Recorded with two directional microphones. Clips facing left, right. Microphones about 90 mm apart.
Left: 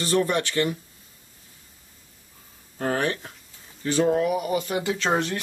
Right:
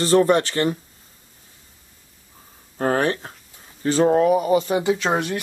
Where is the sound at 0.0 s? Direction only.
35° right (ahead or behind).